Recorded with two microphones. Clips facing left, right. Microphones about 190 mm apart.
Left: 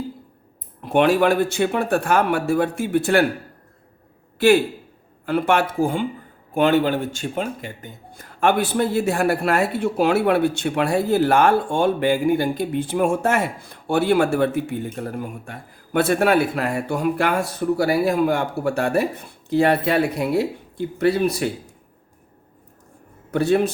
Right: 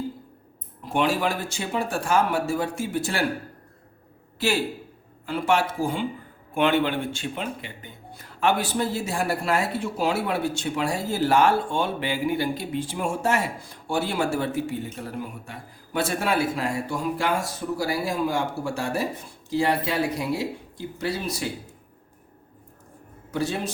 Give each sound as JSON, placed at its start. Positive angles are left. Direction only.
{"t": 0.8, "sound": "speech", "side_deg": 60}
{"t": 4.4, "sound": "a man's voice", "side_deg": 55}
{"t": 6.5, "sound": "speech", "side_deg": 40}
{"t": 23.3, "sound": "speech", "side_deg": 60}